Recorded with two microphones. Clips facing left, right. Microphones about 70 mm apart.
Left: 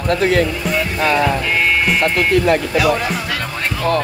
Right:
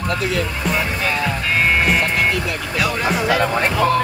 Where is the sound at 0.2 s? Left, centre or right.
Left.